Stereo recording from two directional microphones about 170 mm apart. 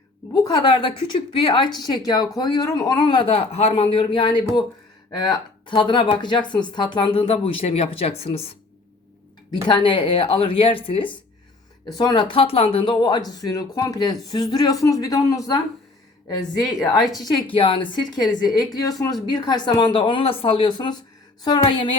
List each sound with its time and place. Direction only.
0.4 s a woman's voice: 25° left (ahead or behind)
9.6 s a woman's voice: 30° left (ahead or behind)
16.4 s a woman's voice: 25° left (ahead or behind)